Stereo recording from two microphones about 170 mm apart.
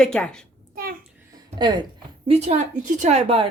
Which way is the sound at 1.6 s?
25° right (ahead or behind).